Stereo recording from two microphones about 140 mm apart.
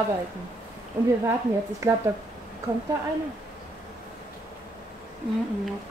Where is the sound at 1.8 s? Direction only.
20° right (ahead or behind).